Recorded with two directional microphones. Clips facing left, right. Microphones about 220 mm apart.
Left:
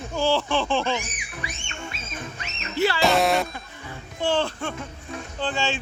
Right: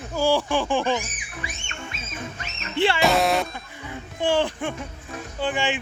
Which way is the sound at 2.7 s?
25° right (ahead or behind).